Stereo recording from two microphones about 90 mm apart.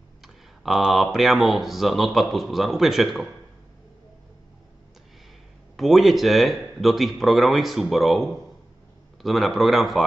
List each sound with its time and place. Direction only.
0.7 s speech: 5° right (ahead or behind)
5.8 s speech: centre (ahead or behind)